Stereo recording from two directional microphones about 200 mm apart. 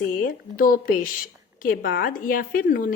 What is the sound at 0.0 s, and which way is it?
Speech, 45° left (ahead or behind).